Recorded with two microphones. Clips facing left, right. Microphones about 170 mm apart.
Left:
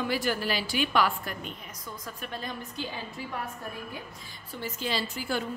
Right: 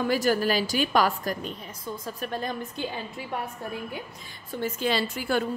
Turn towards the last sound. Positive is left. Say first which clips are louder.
# right 5 dB
turn(degrees=-60)  # may be behind; listen again after turning